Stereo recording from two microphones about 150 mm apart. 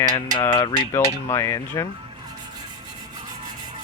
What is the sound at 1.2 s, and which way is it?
Speech, 15° left (ahead or behind).